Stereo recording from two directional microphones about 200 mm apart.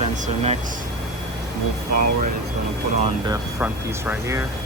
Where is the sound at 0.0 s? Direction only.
30° right (ahead or behind).